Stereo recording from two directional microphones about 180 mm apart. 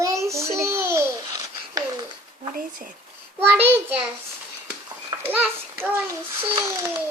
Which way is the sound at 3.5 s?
10° right (ahead or behind).